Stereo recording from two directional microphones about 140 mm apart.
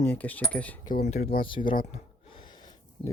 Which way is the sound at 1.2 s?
90° left.